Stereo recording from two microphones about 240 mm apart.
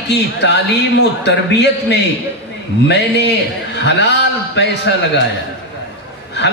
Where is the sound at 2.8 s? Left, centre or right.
Left.